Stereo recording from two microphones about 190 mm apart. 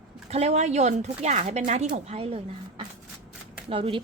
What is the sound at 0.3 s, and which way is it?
A woman's voice, 35° right (ahead or behind).